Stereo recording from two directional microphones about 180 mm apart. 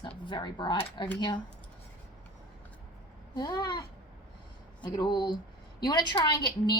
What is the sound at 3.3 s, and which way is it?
A woman's voice, 25° left (ahead or behind).